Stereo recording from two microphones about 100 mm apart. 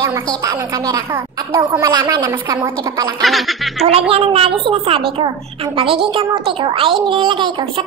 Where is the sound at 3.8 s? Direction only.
75° right (ahead or behind); by 7.8 s 55° right (ahead or behind).